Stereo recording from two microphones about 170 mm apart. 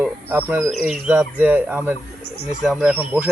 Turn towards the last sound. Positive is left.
turn(degrees=-10)  # may be behind; listen again after turning